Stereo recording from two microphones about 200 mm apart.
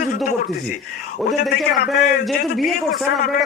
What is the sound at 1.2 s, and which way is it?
A man's voice, centre (ahead or behind).